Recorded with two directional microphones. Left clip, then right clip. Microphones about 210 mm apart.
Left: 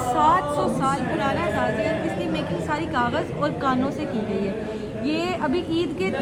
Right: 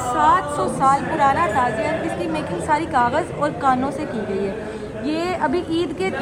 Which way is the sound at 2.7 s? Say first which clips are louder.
Right 7 dB; 15° left (ahead or behind).